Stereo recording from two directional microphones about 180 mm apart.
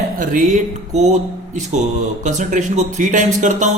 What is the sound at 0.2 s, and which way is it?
Speech, 45° right (ahead or behind).